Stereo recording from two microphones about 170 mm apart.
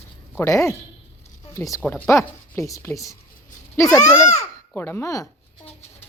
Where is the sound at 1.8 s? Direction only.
10° left (ahead or behind).